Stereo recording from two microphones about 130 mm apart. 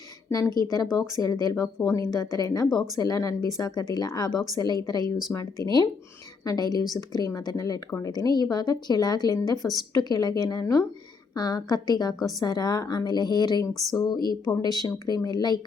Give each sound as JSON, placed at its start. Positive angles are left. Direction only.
{"t": 0.3, "sound": "a woman's voice", "side_deg": 25}